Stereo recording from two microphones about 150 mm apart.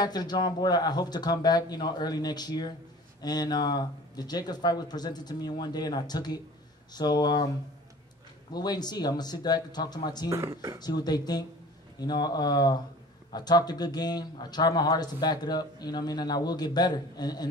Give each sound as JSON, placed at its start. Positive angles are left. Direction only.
{"t": 0.0, "sound": "a man's voice", "side_deg": 25}
{"t": 8.5, "sound": "a man's voice", "side_deg": 25}
{"t": 10.3, "sound": "speech", "side_deg": -20}
{"t": 10.8, "sound": "a man's voice", "side_deg": 25}